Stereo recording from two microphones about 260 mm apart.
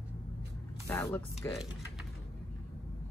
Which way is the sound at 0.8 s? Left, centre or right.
Centre.